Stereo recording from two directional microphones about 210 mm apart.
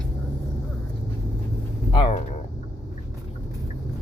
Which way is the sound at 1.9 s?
25° left (ahead or behind).